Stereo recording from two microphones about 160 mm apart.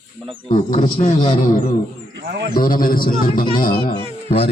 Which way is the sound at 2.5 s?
60° left (ahead or behind).